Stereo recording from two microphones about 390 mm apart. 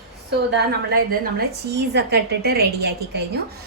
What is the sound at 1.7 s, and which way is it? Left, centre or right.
A woman's voice, right.